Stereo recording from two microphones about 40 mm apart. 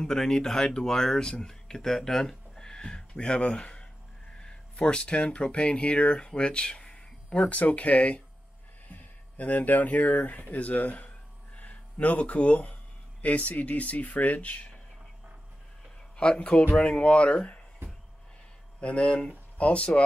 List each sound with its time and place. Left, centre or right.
0.0 s speech: centre; by 14.7 s left
16.2 s speech: left
18.8 s speech: left